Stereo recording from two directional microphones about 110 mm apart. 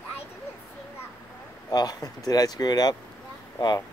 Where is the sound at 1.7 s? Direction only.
35° left (ahead or behind).